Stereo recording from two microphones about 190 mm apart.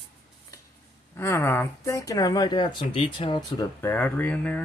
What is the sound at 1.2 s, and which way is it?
Speech, 15° left (ahead or behind).